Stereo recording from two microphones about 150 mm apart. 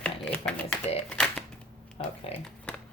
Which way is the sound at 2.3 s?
40° left (ahead or behind).